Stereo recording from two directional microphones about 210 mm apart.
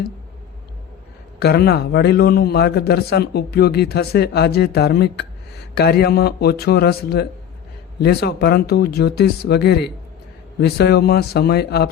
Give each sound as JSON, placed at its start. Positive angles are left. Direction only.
{"t": 1.4, "sound": "a man's voice", "side_deg": 50}